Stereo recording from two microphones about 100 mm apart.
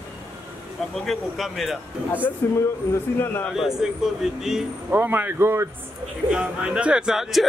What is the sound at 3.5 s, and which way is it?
Speech, 5° right (ahead or behind).